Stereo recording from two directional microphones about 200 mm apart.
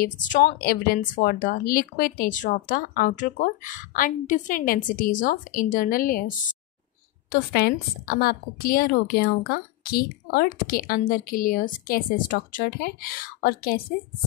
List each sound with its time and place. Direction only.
0.0 s a woman's voice: 40° left (ahead or behind)
7.5 s a woman's voice: 50° left (ahead or behind)